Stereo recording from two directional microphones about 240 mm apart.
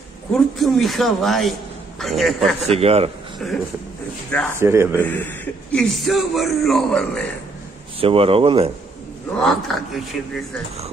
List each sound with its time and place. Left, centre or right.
0.3 s speech: centre
2.6 s speech: right
3.3 s speech: centre
4.6 s speech: centre
5.0 s speech: centre
8.0 s speech: right
9.4 s speech: centre